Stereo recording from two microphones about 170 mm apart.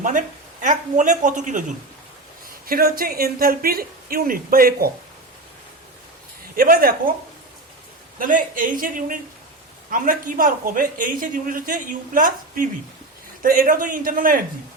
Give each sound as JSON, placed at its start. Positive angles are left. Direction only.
{"t": 0.0, "sound": "speech", "side_deg": -50}
{"t": 2.6, "sound": "a woman's voice", "side_deg": -60}
{"t": 6.6, "sound": "a woman's voice", "side_deg": -60}
{"t": 8.2, "sound": "a woman's voice", "side_deg": -55}